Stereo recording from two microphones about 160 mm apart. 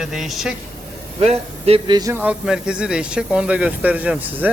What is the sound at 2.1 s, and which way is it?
Speech, 10° right (ahead or behind).